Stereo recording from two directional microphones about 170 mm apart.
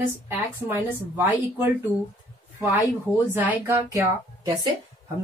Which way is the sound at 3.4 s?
10° right (ahead or behind).